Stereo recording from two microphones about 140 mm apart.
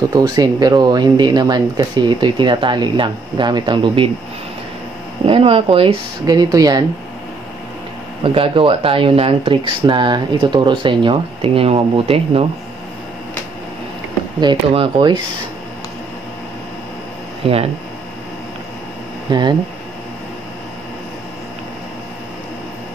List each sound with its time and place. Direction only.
0.1 s speech: 25° right (ahead or behind)
5.2 s speech: 40° right (ahead or behind)
6.2 s speech: 25° right (ahead or behind)
8.2 s speech: 40° right (ahead or behind)
14.4 s speech: 35° right (ahead or behind)
17.4 s speech: 45° right (ahead or behind)
19.3 s speech: 30° right (ahead or behind)